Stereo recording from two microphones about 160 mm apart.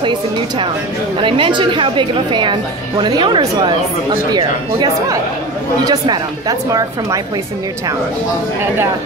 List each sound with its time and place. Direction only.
1.2 s a woman's voice: 30° right (ahead or behind)